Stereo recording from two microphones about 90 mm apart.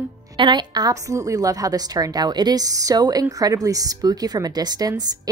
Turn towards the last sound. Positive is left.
turn(degrees=-45)  # may be behind; listen again after turning